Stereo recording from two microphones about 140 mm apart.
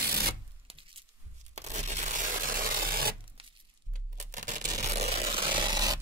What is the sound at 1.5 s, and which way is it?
Crushing, 55° right (ahead or behind).